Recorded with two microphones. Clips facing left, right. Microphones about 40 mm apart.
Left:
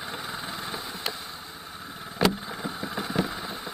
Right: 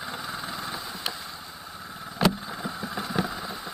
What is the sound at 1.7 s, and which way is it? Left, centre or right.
Vehicle, centre.